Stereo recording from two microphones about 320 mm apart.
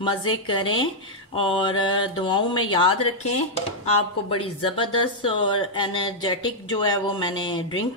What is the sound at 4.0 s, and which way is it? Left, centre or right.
Speech, centre.